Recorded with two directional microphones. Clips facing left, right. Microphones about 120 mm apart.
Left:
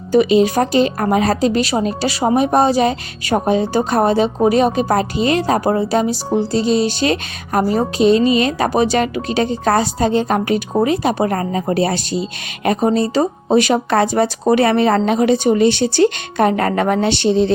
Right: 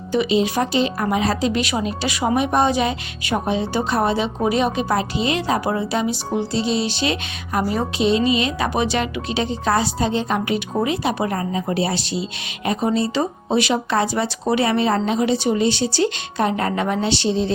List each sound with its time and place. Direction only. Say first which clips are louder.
0.1 s speech: left 6 dB; 50° left (ahead or behind)